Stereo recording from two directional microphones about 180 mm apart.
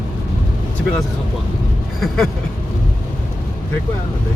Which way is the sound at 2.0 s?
Centre (ahead or behind).